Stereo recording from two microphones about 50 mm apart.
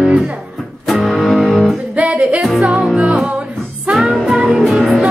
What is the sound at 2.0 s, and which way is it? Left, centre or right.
Music, right.